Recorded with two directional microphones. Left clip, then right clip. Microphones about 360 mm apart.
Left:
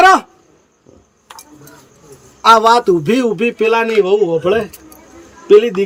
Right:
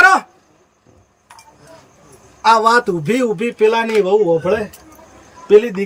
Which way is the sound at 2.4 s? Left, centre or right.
Centre.